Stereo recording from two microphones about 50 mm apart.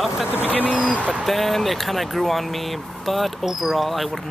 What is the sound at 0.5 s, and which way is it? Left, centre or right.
Speech, left.